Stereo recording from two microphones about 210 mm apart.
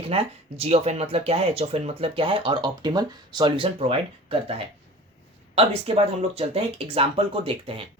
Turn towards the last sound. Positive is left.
turn(degrees=-25)  # may be behind; listen again after turning